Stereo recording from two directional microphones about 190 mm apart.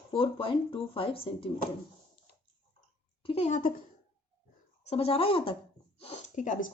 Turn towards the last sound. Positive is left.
turn(degrees=45)  # may be behind; listen again after turning